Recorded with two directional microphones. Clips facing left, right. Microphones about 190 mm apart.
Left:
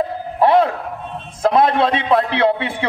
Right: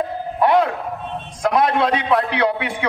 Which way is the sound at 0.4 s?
30° left (ahead or behind).